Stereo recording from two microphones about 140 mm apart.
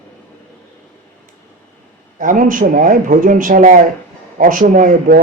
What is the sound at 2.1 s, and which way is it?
Speech, 75° right (ahead or behind).